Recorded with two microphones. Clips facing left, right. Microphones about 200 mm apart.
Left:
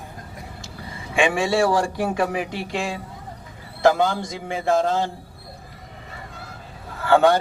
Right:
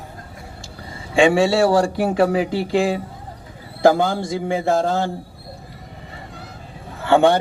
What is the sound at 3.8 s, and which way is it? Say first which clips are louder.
Speech: right 3 dB; 30° right (ahead or behind).